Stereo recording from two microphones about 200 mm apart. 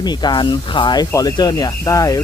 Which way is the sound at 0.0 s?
20° left (ahead or behind).